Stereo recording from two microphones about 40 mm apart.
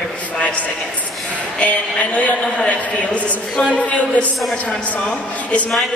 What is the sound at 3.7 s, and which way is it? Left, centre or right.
Speech, left.